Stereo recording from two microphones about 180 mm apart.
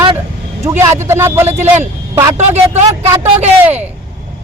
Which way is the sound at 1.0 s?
15° right (ahead or behind).